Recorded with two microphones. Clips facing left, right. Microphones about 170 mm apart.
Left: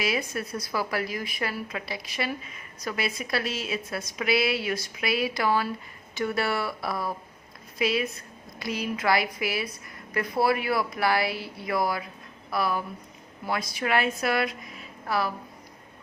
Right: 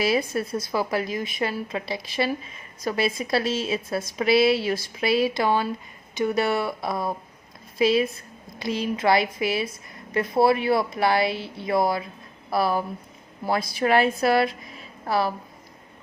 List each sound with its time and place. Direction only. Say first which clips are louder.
0.0 s a woman's voice: right 6 dB; 30° right (ahead or behind)